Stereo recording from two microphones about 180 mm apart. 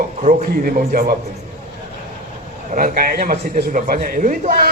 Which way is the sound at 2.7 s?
50° right (ahead or behind).